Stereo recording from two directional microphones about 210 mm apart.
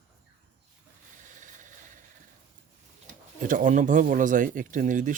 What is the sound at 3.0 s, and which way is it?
Speech, 40° right (ahead or behind).